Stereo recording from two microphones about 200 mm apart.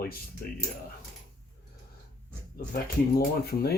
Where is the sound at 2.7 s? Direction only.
50° left (ahead or behind).